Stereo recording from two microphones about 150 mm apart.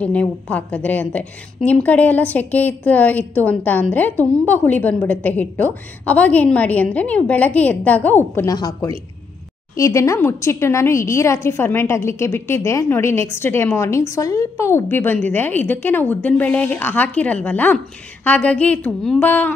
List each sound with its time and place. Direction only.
0.0 s a woman's voice: 10° left (ahead or behind)
8.5 s a woman's voice: 25° left (ahead or behind); by 19.5 s 10° left (ahead or behind)